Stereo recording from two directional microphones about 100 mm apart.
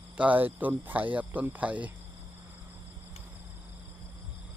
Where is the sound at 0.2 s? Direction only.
15° right (ahead or behind).